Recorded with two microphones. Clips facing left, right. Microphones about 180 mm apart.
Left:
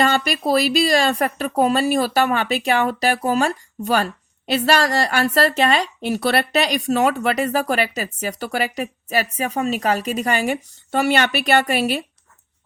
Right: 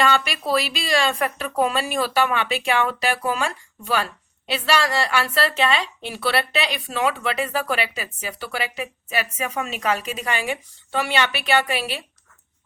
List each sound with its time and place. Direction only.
0.0 s speech: 40° left (ahead or behind)